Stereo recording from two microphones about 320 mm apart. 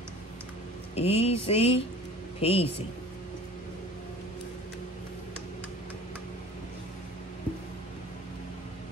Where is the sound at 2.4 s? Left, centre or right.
Centre.